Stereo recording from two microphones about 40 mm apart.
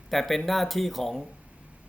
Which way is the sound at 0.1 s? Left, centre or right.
Centre.